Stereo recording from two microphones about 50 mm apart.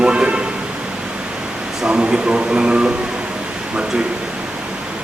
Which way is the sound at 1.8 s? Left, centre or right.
Centre.